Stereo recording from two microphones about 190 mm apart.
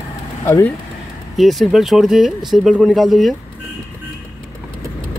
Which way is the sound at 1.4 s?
Centre (ahead or behind).